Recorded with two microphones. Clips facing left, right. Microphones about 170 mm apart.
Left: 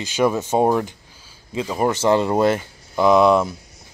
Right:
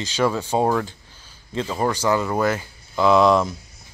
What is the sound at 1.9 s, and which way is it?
Speech, 25° left (ahead or behind).